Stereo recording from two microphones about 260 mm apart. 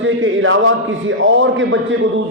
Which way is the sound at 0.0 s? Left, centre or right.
Right.